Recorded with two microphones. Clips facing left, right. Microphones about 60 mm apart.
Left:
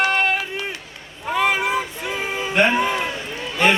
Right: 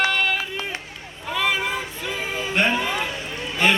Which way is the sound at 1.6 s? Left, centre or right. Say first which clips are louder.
Left 4 dB; centre.